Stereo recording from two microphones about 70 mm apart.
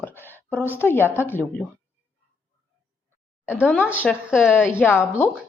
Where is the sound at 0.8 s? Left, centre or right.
Left.